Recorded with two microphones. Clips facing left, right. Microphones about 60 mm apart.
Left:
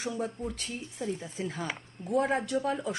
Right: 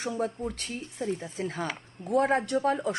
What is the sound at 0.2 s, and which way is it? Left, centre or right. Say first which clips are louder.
Speech: right 3 dB; right.